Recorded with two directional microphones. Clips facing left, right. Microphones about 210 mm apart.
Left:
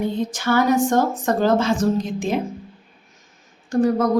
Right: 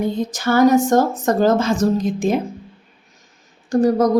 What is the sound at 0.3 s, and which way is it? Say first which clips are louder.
A woman's voice: right 6 dB; 40° right (ahead or behind).